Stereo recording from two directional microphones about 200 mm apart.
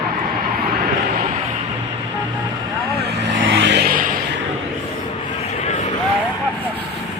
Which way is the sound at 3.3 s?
65° right (ahead or behind).